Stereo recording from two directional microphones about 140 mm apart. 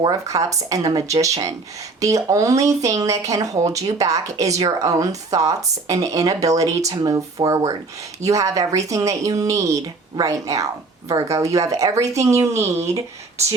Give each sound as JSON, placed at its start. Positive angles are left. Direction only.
{"t": 0.0, "sound": "speech", "side_deg": -25}